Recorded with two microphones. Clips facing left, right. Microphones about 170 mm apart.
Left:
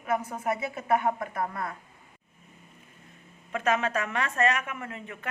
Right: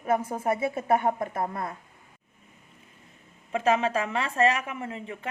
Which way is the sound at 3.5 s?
30° right (ahead or behind).